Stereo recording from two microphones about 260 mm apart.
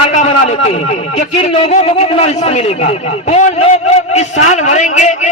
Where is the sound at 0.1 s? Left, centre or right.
Left.